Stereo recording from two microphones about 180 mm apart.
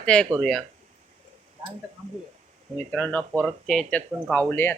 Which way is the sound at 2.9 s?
5° left (ahead or behind).